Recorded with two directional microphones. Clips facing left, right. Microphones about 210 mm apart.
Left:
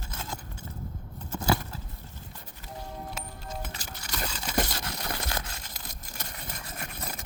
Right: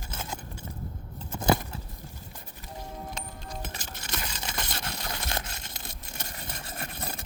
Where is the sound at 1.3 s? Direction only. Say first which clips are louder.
Right 2 dB; 20° right (ahead or behind).